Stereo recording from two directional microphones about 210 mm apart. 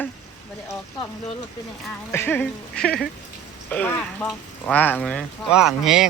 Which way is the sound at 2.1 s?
10° left (ahead or behind).